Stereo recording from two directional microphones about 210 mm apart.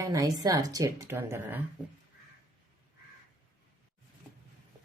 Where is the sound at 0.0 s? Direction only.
15° right (ahead or behind).